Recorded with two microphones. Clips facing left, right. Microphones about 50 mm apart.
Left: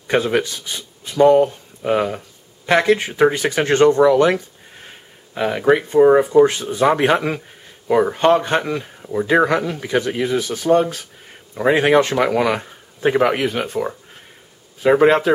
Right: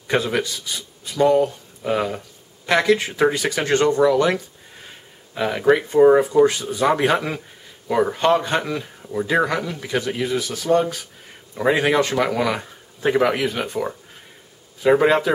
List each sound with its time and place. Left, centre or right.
0.0 s speech: centre
4.3 s a sound: centre
5.6 s speech: centre
6.4 s speech: left
7.0 s speech: centre
12.1 s speech: centre